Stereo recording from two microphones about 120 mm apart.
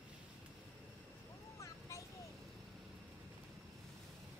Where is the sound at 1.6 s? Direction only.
25° left (ahead or behind).